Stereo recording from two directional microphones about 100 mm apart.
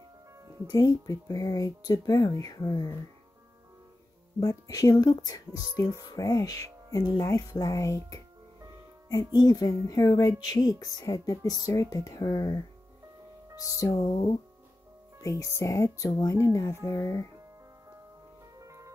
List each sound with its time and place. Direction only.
0.7 s speech: 45° left (ahead or behind)
4.4 s speech: 35° left (ahead or behind)
9.3 s speech: 40° left (ahead or behind)
13.7 s speech: 35° left (ahead or behind)
14.0 s speech: 65° left (ahead or behind)
15.2 s speech: 30° left (ahead or behind)
18.6 s music: 30° right (ahead or behind)